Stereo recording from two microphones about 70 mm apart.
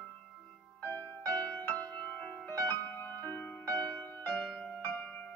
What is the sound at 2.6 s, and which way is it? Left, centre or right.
Music, left.